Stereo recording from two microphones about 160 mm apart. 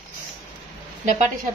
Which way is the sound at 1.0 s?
45° right (ahead or behind).